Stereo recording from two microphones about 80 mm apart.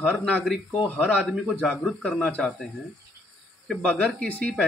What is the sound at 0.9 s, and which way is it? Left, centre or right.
Speech, centre.